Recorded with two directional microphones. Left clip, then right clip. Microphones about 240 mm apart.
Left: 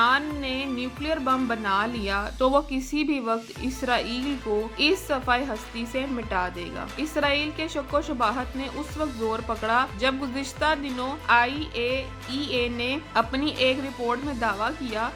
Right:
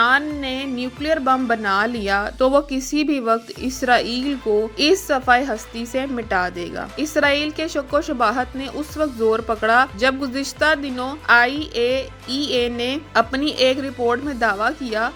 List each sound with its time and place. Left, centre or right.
0.0 s speech: right
4.5 s speech: centre
4.8 s speech: centre